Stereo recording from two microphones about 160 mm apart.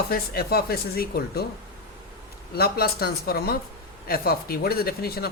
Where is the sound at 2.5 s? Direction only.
75° left (ahead or behind).